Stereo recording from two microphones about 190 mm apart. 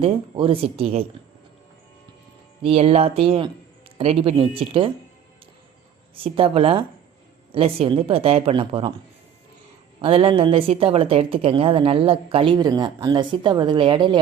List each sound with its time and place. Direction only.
0.0 s a woman's voice: 30° right (ahead or behind)
2.6 s a woman's voice: 30° right (ahead or behind)
6.2 s a woman's voice: 30° right (ahead or behind)
10.0 s a woman's voice: 30° right (ahead or behind)